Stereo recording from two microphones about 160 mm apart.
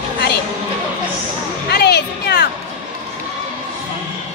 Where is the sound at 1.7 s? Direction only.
90° left.